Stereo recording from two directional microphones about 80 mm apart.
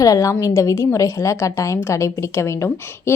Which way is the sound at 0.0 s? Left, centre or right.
Left.